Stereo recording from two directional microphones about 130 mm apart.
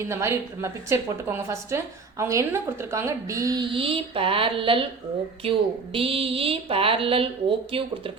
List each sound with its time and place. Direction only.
0.0 s a woman's voice: 20° right (ahead or behind)
3.6 s a woman's voice: 40° right (ahead or behind)